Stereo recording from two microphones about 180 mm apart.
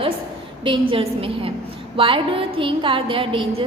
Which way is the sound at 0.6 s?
30° right (ahead or behind).